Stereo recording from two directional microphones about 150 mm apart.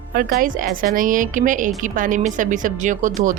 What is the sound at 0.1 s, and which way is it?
A woman's voice, 75° right (ahead or behind).